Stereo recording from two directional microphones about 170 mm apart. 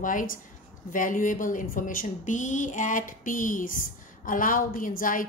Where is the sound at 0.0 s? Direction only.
50° left (ahead or behind).